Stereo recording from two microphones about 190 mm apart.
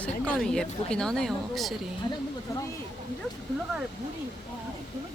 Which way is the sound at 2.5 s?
15° left (ahead or behind).